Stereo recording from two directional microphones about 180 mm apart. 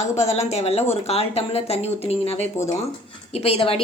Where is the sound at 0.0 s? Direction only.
40° left (ahead or behind).